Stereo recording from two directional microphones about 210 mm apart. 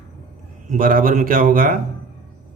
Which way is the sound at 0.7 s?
40° right (ahead or behind).